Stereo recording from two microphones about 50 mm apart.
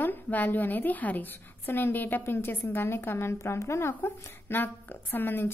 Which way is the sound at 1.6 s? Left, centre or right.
Left.